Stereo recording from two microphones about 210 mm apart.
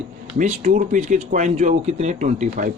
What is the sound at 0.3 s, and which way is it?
Speech, 35° right (ahead or behind).